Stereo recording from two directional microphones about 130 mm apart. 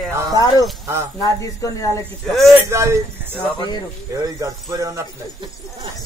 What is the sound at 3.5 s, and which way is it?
Speech, 35° left (ahead or behind).